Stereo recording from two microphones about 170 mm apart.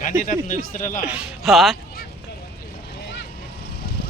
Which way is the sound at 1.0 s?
5° right (ahead or behind).